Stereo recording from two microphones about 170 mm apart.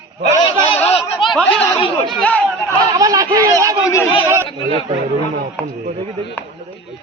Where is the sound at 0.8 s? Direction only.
35° left (ahead or behind).